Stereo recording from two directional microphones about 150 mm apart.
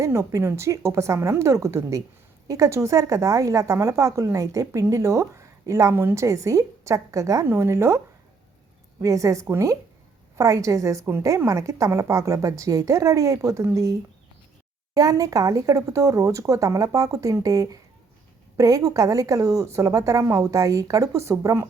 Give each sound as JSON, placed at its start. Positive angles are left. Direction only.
{"t": 0.0, "sound": "a woman's voice", "side_deg": -20}
{"t": 14.9, "sound": "a woman's voice", "side_deg": -25}